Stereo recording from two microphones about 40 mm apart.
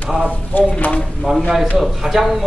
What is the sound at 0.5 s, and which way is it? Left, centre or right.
Speech, left.